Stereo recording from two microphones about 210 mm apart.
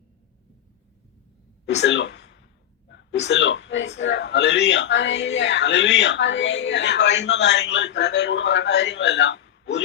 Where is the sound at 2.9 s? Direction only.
60° left (ahead or behind).